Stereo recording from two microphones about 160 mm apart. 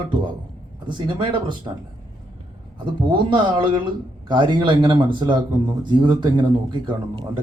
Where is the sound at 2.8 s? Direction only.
30° right (ahead or behind).